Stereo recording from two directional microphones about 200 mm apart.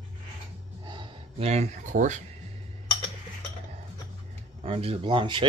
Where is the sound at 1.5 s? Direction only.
35° right (ahead or behind).